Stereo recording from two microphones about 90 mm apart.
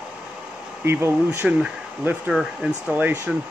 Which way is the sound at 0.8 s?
25° right (ahead or behind).